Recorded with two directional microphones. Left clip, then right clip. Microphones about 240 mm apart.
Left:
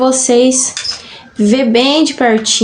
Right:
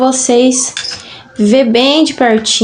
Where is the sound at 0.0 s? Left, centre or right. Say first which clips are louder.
Even; centre.